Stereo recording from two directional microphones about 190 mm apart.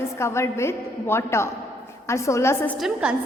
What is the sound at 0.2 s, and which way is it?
A woman's voice, 15° left (ahead or behind).